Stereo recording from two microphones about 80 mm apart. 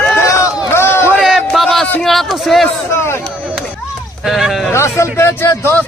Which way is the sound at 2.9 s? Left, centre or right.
Left.